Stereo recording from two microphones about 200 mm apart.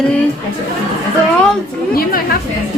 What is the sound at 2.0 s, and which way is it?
Speech, 50° left (ahead or behind).